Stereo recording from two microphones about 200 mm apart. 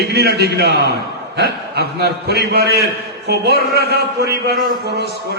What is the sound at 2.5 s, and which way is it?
Speech, 55° right (ahead or behind).